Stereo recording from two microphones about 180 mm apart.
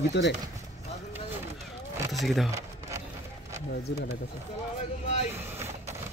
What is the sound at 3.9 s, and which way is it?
Speech, 75° left (ahead or behind).